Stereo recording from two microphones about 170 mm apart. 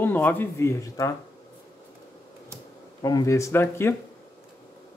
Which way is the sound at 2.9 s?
20° left (ahead or behind).